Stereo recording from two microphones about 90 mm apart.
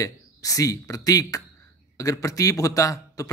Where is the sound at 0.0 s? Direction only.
40° left (ahead or behind).